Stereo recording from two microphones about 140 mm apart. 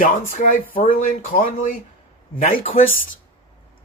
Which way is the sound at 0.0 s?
70° left (ahead or behind).